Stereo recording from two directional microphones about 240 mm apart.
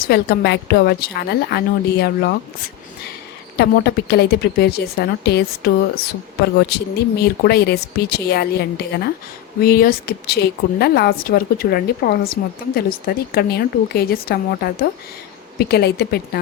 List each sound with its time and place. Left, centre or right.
0.1 s a woman's voice: left
3.6 s a woman's voice: left